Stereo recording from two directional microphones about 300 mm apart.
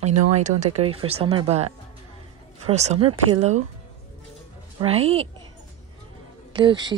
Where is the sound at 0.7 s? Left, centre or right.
Centre.